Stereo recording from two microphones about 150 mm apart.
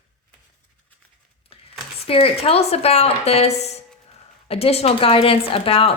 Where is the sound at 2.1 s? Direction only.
40° left (ahead or behind).